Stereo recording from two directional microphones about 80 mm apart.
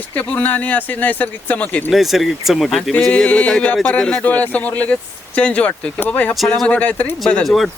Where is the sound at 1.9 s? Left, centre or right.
Centre.